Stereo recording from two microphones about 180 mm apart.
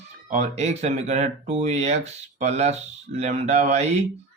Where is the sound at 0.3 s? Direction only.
40° right (ahead or behind).